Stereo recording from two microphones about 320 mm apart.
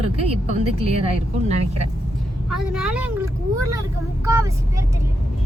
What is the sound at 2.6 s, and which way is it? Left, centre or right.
Speech, centre.